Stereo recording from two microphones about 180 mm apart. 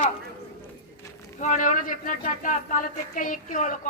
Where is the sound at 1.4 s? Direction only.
45° left (ahead or behind).